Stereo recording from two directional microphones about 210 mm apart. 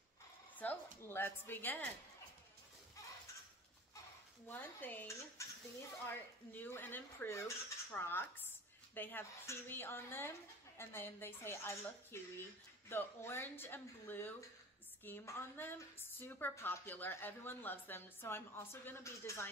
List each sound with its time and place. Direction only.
0.6 s a sound: 5° left (ahead or behind)
1.0 s a woman's voice: 10° left (ahead or behind)
4.5 s a woman's voice: 10° left (ahead or behind)
6.5 s a woman's voice: 10° left (ahead or behind)